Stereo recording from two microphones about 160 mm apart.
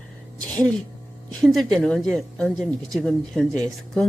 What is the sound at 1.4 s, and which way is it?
Speech, centre (ahead or behind).